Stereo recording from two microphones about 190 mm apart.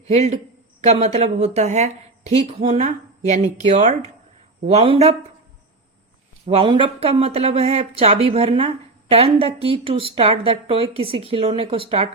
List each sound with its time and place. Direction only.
0.1 s speech: 35° right (ahead or behind)
6.4 s speech: 30° right (ahead or behind)